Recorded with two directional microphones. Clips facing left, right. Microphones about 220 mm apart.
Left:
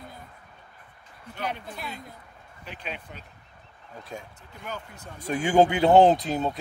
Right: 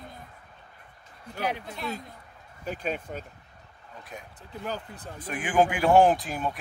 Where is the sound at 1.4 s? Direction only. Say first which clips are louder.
Right 2 dB; 5° right (ahead or behind).